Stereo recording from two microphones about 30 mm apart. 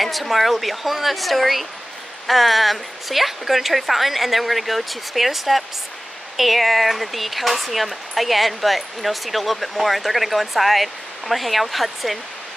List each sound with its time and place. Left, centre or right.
0.0 s speech: centre